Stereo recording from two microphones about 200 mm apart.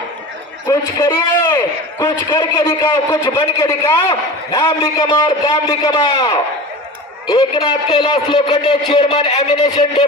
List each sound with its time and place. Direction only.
0.7 s a man's voice: 15° left (ahead or behind)
2.0 s a man's voice: 25° left (ahead or behind)